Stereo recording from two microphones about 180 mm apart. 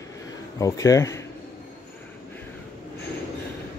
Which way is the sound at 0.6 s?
20° left (ahead or behind).